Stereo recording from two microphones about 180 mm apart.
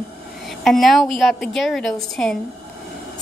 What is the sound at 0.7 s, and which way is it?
A woman's voice, centre (ahead or behind).